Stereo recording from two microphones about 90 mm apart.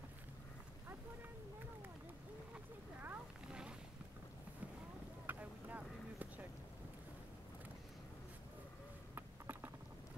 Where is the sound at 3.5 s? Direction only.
10° right (ahead or behind).